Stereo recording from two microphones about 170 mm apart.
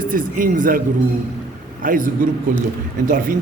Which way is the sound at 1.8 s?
50° right (ahead or behind).